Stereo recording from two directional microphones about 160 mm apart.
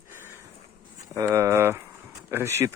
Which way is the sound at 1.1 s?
15° right (ahead or behind).